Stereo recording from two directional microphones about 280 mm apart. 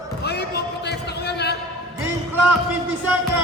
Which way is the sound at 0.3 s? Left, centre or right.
Left.